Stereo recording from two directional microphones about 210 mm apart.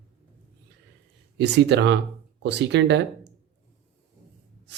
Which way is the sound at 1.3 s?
55° right (ahead or behind).